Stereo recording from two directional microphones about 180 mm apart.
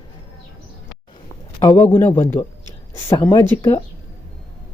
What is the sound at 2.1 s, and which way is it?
Speech, 10° left (ahead or behind).